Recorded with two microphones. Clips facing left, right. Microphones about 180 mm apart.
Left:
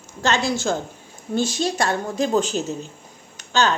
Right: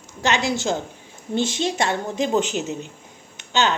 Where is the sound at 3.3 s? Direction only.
20° right (ahead or behind).